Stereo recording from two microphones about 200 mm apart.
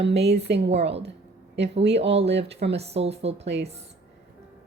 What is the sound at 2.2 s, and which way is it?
Speech, 60° right (ahead or behind).